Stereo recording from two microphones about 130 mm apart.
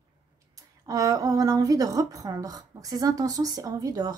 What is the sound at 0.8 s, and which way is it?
A woman's voice, 30° right (ahead or behind).